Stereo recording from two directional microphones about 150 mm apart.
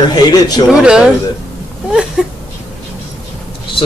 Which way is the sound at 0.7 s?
5° right (ahead or behind).